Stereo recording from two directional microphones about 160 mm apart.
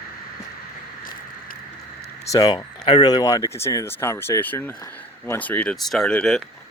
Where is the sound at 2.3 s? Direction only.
25° left (ahead or behind); by 6.5 s 5° left (ahead or behind).